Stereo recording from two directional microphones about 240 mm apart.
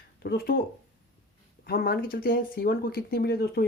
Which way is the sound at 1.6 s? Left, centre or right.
Left.